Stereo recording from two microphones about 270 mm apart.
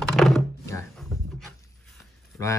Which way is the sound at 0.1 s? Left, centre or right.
Centre.